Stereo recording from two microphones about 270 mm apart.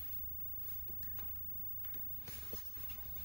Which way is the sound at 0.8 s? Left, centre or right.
Left.